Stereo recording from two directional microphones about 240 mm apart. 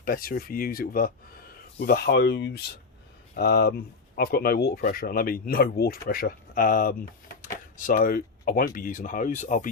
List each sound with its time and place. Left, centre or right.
0.0 s speech: left